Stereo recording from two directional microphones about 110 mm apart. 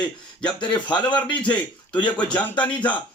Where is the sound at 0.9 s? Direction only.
45° left (ahead or behind).